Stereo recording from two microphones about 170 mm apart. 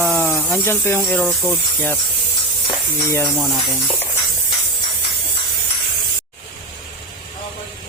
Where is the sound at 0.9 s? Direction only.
Centre (ahead or behind).